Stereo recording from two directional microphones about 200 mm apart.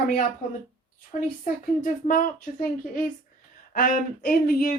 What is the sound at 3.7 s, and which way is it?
A woman's voice, 45° left (ahead or behind).